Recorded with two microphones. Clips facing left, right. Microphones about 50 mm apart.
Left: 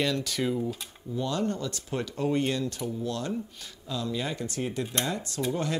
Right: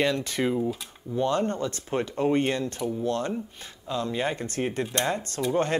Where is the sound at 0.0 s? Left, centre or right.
Right.